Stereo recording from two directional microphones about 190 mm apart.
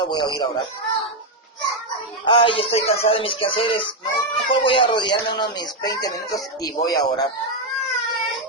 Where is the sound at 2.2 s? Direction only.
25° left (ahead or behind).